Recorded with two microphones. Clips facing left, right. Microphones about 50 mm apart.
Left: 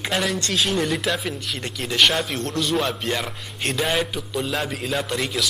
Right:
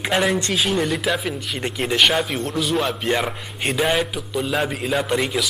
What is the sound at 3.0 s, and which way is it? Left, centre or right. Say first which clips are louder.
Speech: right 4 dB; centre.